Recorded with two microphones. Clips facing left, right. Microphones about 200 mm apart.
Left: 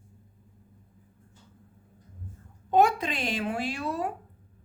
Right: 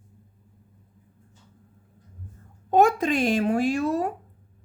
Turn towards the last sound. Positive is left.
turn(degrees=-45)  # may be behind; listen again after turning